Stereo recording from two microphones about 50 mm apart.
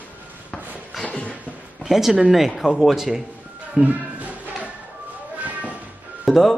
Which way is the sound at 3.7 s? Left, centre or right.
Right.